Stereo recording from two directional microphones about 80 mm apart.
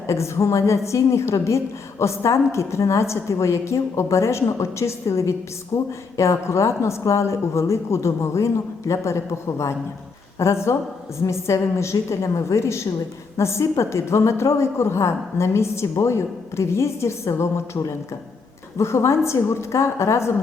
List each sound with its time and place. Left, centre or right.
0.1 s a woman's voice: left